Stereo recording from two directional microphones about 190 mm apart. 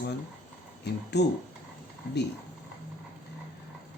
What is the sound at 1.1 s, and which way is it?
Speech, 60° left (ahead or behind).